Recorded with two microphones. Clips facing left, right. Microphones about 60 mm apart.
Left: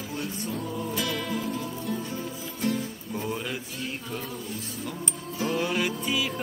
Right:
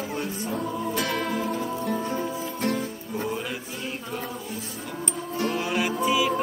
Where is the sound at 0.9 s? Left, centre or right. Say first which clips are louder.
Right 3 dB; right.